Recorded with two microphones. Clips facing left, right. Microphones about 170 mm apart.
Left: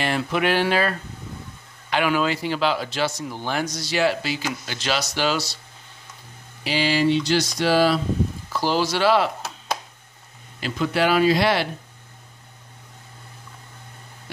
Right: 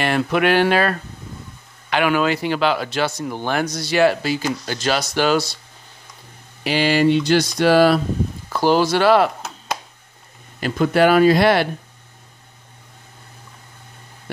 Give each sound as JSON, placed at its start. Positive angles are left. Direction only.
{"t": 0.0, "sound": "speech", "side_deg": -60}
{"t": 6.6, "sound": "speech", "side_deg": -55}
{"t": 10.6, "sound": "speech", "side_deg": -50}